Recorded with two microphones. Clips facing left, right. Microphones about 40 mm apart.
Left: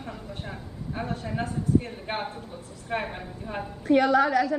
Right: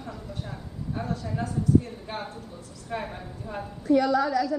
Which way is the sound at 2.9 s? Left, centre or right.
Left.